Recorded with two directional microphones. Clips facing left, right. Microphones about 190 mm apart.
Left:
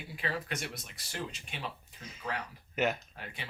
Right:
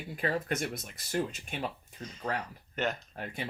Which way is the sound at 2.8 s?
5° left (ahead or behind).